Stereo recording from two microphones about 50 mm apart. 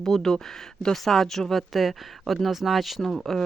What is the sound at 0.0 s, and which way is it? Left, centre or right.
Speech, centre.